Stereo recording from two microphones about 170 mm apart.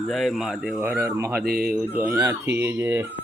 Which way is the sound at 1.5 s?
5° right (ahead or behind).